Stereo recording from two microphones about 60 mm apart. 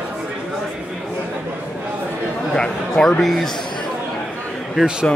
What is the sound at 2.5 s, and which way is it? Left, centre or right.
Speech, centre.